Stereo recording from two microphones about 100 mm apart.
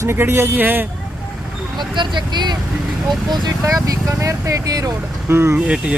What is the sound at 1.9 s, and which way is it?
Speech, 50° right (ahead or behind).